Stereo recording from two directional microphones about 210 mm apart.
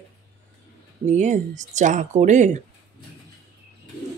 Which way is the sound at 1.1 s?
35° right (ahead or behind).